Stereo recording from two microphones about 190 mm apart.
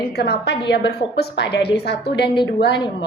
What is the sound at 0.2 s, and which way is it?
A woman's voice, 60° left (ahead or behind).